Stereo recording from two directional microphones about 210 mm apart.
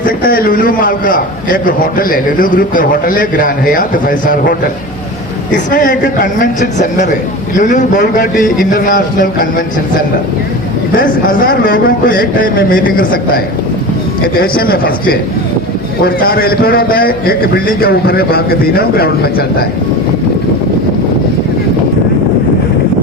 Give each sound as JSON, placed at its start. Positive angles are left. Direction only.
{"t": 0.0, "sound": "a man's voice", "side_deg": 40}
{"t": 10.9, "sound": "a man's voice", "side_deg": 40}